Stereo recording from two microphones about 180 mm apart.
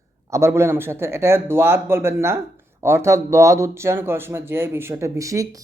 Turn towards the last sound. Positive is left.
turn(degrees=-15)  # may be behind; listen again after turning